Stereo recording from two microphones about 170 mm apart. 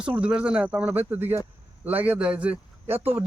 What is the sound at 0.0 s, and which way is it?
A man's voice, 5° right (ahead or behind).